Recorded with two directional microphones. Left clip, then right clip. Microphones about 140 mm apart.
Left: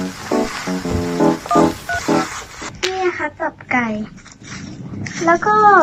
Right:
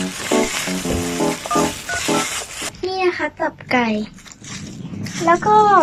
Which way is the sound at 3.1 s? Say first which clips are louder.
Even; 50° right (ahead or behind).